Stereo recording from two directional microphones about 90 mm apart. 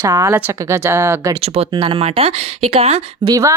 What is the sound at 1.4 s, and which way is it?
Speech, 75° right (ahead or behind).